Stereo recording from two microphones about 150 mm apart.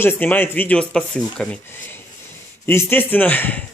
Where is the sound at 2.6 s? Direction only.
15° left (ahead or behind).